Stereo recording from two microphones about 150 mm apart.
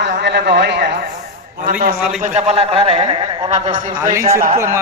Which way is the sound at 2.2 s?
50° right (ahead or behind).